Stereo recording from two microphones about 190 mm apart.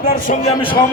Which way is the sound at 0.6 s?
25° left (ahead or behind).